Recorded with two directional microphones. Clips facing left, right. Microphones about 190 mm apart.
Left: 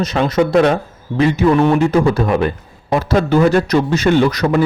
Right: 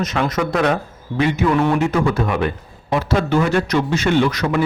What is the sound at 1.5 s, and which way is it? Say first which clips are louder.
Speech: left 4 dB; 25° left (ahead or behind).